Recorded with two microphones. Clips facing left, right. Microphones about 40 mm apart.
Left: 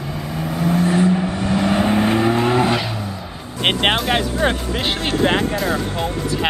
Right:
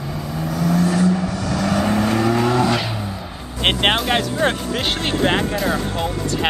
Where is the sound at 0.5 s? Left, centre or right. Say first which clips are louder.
Left 1 dB; left.